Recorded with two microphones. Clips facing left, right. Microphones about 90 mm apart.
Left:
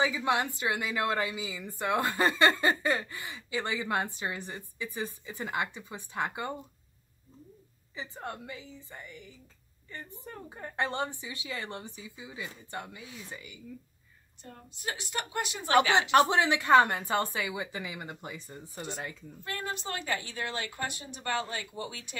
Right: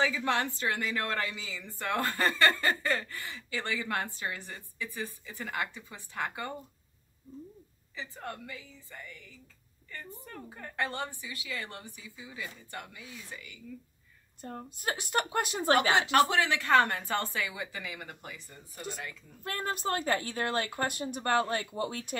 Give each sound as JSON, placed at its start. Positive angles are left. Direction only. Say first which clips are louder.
{"t": 0.0, "sound": "a woman's voice", "louder": "left 1 dB", "side_deg": 15}
{"t": 7.9, "sound": "a woman's voice", "louder": "left 1 dB", "side_deg": 20}
{"t": 14.4, "sound": "speech", "louder": "right 3 dB", "side_deg": -45}
{"t": 15.9, "sound": "a woman's voice", "louder": "left 2 dB", "side_deg": 25}
{"t": 19.4, "sound": "speech", "louder": "right 3 dB", "side_deg": -45}